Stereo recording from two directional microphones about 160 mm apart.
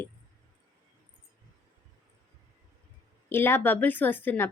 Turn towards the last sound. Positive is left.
turn(degrees=10)  # may be behind; listen again after turning